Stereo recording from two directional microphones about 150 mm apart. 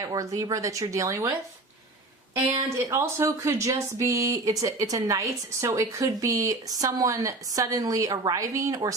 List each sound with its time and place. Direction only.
0.0 s speech: 20° right (ahead or behind)
2.7 s speech: 20° right (ahead or behind)